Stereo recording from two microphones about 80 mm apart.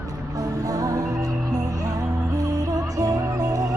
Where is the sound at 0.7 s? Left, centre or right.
Right.